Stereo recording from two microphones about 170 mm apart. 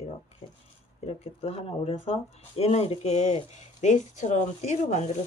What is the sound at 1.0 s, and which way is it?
Speech, 35° left (ahead or behind).